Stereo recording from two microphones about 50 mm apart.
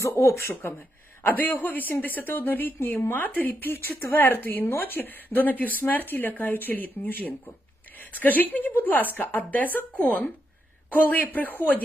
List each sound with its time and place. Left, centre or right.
0.0 s speech: left
1.2 s speech: left